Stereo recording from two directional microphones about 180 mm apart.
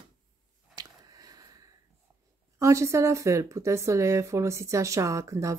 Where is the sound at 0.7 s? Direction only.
20° right (ahead or behind).